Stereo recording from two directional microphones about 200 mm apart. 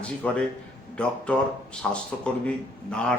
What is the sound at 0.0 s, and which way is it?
Speech, 5° left (ahead or behind).